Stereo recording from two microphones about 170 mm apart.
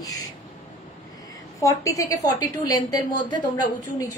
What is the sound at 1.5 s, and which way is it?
A woman's voice, 20° left (ahead or behind).